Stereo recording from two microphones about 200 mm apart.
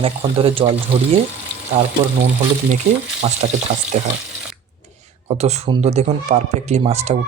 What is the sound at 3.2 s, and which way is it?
Frying, 30° right (ahead or behind).